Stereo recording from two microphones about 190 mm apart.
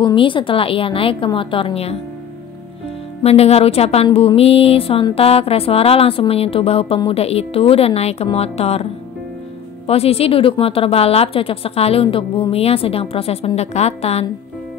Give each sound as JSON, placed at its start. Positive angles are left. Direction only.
{"t": 0.0, "sound": "a woman's voice", "side_deg": 25}
{"t": 3.2, "sound": "speech", "side_deg": 30}
{"t": 9.8, "sound": "speech", "side_deg": 30}